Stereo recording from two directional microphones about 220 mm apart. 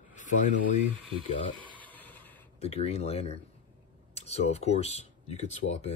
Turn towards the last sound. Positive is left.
turn(degrees=30)  # may be behind; listen again after turning